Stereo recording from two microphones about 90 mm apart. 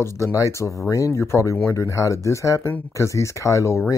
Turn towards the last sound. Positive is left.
turn(degrees=35)  # may be behind; listen again after turning